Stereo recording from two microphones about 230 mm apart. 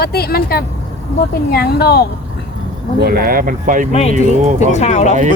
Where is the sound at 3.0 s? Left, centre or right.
Right.